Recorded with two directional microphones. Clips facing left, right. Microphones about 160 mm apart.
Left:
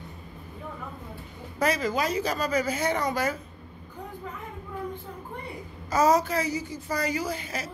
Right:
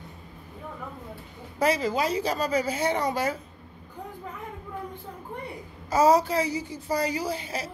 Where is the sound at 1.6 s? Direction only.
30° right (ahead or behind).